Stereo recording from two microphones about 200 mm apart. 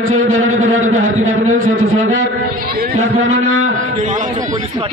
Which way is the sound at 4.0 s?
40° right (ahead or behind).